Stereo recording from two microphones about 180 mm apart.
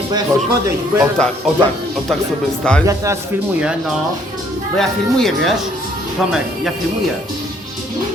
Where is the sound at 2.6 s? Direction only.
5° left (ahead or behind).